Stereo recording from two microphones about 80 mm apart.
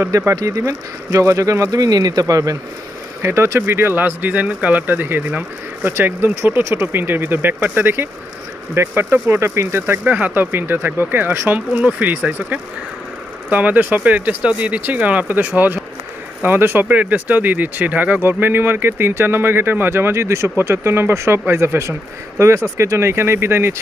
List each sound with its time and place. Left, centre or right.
0.0 s speech: right
3.2 s speech: right